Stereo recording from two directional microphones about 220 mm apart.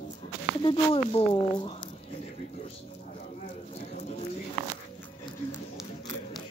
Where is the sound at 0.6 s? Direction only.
25° left (ahead or behind).